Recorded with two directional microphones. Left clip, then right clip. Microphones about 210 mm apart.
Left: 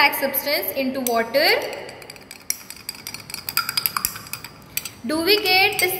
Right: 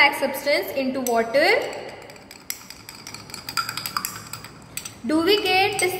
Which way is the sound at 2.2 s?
5° right (ahead or behind).